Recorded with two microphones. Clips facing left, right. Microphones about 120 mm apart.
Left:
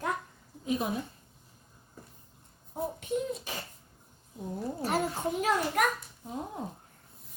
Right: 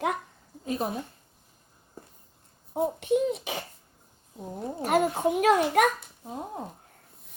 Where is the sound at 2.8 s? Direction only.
80° right.